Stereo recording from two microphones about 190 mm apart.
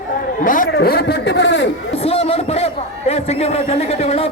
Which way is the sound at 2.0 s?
30° left (ahead or behind).